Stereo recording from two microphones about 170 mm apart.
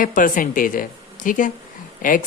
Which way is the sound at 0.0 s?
50° left (ahead or behind).